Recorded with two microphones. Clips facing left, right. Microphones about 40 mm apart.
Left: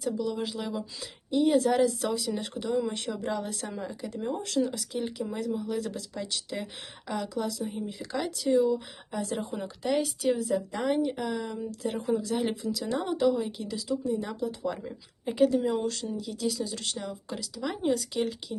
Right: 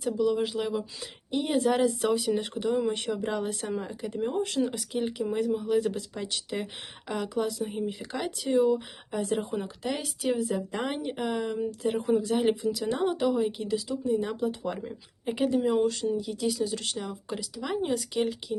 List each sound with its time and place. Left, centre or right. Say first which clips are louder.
0.0 s speech: right 4 dB; centre
1.4 s speech: left 2 dB; centre
8.5 s speech: right 1 dB; right
9.3 s speech: right 3 dB; centre
10.7 s speech: left 4 dB; right
11.2 s speech: right 3 dB; right
11.8 s speech: right 2 dB; centre
14.1 s speech: right 3 dB; right
14.4 s speech: right 1 dB; right
14.8 s speech: right 2 dB; centre
15.4 s speech: left 3 dB; centre
15.6 s speech: right 4 dB; centre